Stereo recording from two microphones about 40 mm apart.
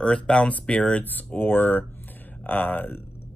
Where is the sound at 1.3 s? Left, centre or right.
Left.